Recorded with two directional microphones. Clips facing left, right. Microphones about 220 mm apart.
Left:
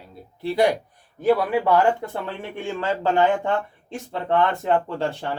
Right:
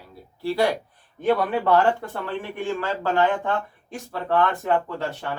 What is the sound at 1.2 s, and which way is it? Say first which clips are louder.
Speech: left 2 dB; 5° left (ahead or behind).